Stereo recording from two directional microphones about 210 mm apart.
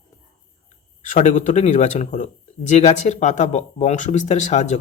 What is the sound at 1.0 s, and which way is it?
A man's voice, 35° left (ahead or behind).